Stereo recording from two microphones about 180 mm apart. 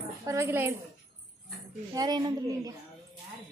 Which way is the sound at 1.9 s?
25° right (ahead or behind).